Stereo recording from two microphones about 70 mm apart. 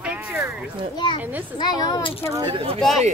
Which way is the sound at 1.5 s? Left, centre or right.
Left.